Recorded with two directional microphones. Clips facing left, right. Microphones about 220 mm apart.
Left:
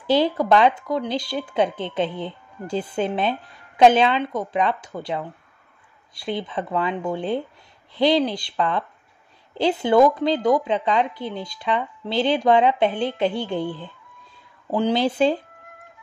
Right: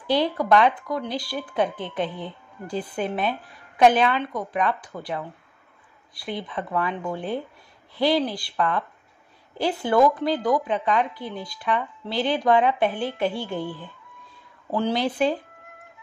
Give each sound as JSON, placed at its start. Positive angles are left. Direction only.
{"t": 0.1, "sound": "a woman's voice", "side_deg": 25}
{"t": 6.4, "sound": "a woman's voice", "side_deg": 25}
{"t": 15.0, "sound": "a woman's voice", "side_deg": 25}